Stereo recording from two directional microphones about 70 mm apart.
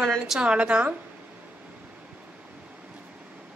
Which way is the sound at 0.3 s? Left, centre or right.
Centre.